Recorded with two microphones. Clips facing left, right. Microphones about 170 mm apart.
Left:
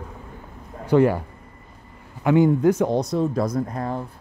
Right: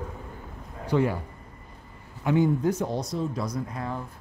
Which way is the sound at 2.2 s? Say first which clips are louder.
Left 6 dB; 70° left (ahead or behind).